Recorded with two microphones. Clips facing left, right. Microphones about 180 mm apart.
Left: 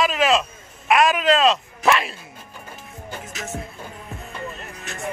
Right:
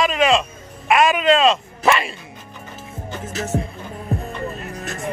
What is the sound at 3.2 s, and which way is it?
Music, 30° right (ahead or behind).